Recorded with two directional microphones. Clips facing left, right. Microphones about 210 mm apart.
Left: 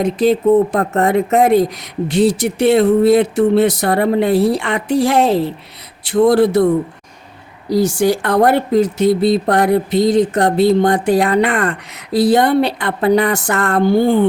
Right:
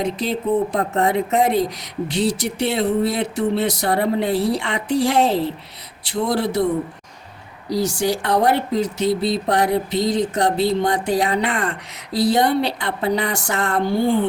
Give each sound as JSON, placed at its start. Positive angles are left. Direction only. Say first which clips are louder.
{"t": 0.0, "sound": "speech", "louder": "left 9 dB", "side_deg": 50}
{"t": 7.7, "sound": "speech", "louder": "left 6 dB", "side_deg": 55}